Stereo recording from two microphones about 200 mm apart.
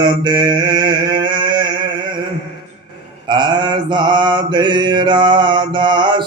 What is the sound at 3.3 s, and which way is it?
Mantra, 20° right (ahead or behind).